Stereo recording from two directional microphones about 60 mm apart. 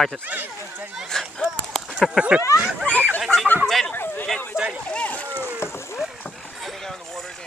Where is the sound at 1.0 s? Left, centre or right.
Centre.